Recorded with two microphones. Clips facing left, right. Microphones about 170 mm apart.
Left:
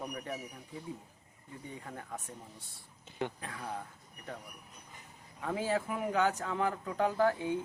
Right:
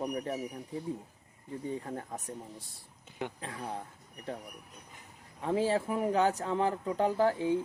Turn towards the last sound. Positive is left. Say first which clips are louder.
# right 2 dB
turn(degrees=-30)  # may be behind; listen again after turning